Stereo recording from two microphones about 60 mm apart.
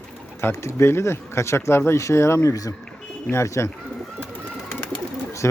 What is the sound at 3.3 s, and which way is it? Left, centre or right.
Speech, left.